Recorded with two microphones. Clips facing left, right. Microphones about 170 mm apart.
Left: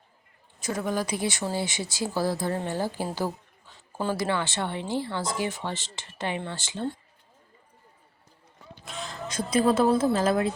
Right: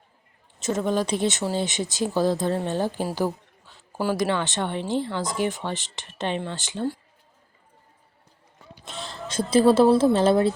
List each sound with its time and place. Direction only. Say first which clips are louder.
0.6 s speech: right 5 dB; 25° right (ahead or behind)
8.8 s a sound: even; 30° right (ahead or behind)
9.9 s speech: right 5 dB; 30° right (ahead or behind)